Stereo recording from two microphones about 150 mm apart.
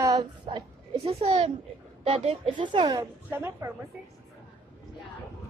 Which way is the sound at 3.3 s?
15° right (ahead or behind).